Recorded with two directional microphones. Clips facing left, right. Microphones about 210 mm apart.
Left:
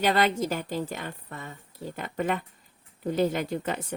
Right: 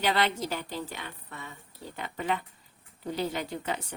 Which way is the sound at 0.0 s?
45° left (ahead or behind).